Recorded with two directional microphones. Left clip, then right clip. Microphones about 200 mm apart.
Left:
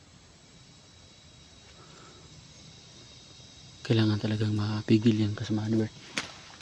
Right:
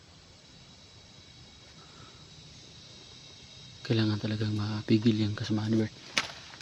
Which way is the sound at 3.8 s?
25° left (ahead or behind).